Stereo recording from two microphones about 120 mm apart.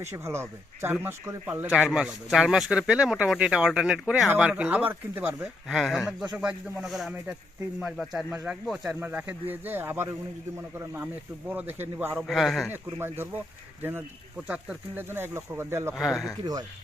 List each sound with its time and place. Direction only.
0.0 s speech: 20° right (ahead or behind)
1.9 s speech: centre (ahead or behind)
5.6 s speech: centre (ahead or behind)
9.0 s speech: 15° right (ahead or behind)
12.1 s speech: centre (ahead or behind)
12.7 s speech: 20° right (ahead or behind)
14.4 s speech: 10° right (ahead or behind)
16.0 s speech: centre (ahead or behind)